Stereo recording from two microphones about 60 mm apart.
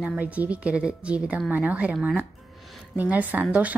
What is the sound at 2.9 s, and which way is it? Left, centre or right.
Speech, right.